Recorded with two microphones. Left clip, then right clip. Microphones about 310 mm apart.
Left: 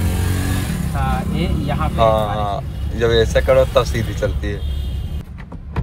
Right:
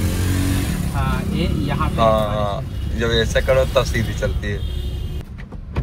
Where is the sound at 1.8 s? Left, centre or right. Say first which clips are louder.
Left 1 dB; centre.